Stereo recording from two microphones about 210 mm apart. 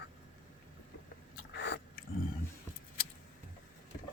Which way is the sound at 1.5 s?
50° left (ahead or behind).